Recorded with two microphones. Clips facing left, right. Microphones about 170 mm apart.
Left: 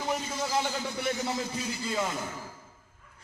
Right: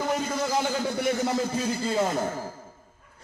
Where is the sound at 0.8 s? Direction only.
50° right (ahead or behind).